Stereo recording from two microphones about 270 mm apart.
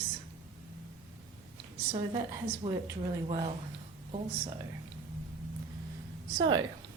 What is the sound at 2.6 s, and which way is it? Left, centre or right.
Speech, centre.